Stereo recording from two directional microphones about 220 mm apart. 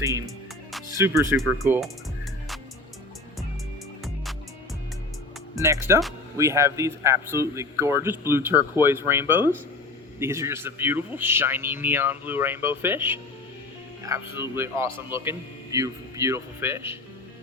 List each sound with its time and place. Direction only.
0.0 s speech: 15° right (ahead or behind)
5.5 s speech: 15° right (ahead or behind)
14.5 s speech: 10° right (ahead or behind)